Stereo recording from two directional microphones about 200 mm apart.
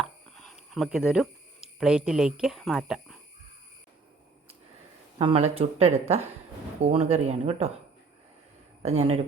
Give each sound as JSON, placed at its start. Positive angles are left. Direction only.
{"t": 0.0, "sound": "a sound", "side_deg": 0}
{"t": 5.2, "sound": "speech", "side_deg": -30}
{"t": 8.8, "sound": "speech", "side_deg": -30}